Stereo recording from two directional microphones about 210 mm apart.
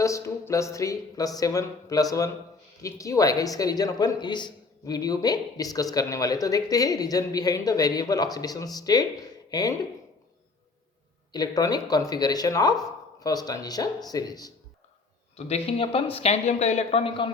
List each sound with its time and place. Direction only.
0.0 s a woman's voice: 15° left (ahead or behind)
11.3 s a woman's voice: 20° left (ahead or behind)
15.4 s speech: 30° left (ahead or behind)